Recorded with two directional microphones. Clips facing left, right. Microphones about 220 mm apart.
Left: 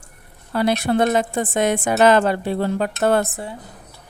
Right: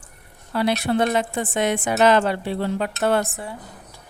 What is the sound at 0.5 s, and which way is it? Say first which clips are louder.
A woman's voice: left 2 dB; 45° left (ahead or behind).